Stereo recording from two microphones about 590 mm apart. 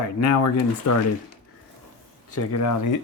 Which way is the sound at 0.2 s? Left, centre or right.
Left.